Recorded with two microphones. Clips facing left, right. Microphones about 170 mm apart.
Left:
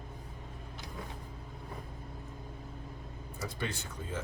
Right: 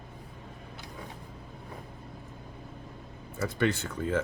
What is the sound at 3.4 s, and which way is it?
Speech, 65° right (ahead or behind).